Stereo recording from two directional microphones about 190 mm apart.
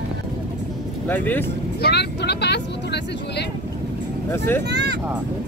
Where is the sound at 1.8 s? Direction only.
60° left (ahead or behind).